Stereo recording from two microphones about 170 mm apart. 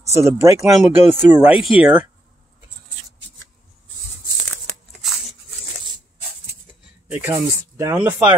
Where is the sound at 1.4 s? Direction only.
5° right (ahead or behind).